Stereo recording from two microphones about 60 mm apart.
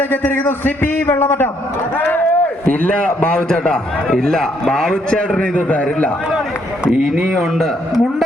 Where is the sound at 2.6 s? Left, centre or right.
Left.